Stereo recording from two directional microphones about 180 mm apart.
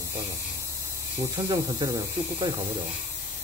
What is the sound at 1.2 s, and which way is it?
Speech, 20° right (ahead or behind).